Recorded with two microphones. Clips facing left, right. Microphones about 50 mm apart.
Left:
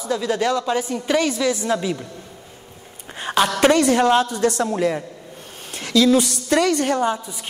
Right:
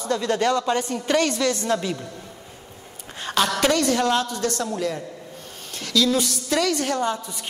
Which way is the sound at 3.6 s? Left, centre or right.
Left.